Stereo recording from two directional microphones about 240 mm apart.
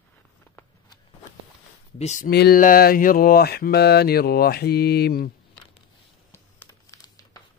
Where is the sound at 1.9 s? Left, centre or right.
Left.